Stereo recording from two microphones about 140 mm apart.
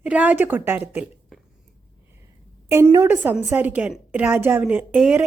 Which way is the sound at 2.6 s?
20° right (ahead or behind).